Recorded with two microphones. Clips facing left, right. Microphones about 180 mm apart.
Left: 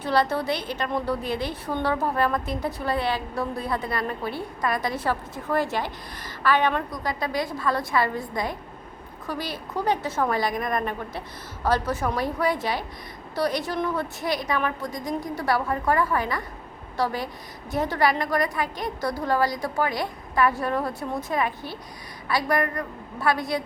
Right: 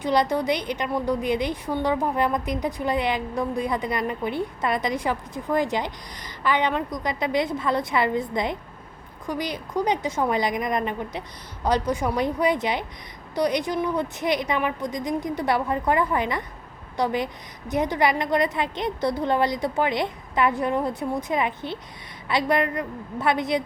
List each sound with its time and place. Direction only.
0.0 s a woman's voice: 15° right (ahead or behind)